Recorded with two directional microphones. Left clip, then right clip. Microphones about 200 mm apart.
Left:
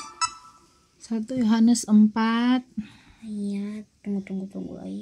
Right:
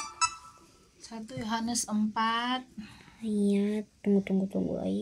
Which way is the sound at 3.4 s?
45° right (ahead or behind).